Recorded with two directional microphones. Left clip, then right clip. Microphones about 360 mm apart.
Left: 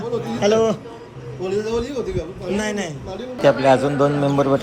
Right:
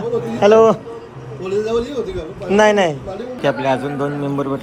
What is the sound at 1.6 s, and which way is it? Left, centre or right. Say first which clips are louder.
Speech: right 4 dB; centre.